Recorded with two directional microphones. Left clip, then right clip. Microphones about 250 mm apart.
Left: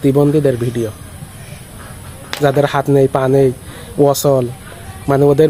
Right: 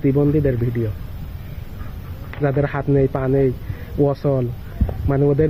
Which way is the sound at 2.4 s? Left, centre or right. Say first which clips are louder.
Left 8 dB; centre.